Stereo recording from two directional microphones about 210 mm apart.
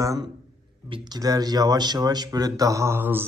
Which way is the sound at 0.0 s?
15° right (ahead or behind).